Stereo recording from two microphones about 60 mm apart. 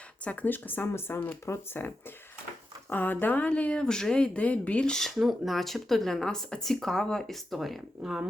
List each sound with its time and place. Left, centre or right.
0.3 s speech: left
1.5 s speech: left
2.9 s speech: left; by 5.1 s centre
5.1 s speech: centre